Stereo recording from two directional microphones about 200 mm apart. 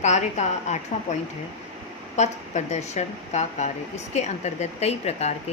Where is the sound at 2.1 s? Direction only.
35° left (ahead or behind).